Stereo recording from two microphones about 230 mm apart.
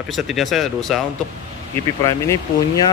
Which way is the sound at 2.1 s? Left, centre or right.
Centre.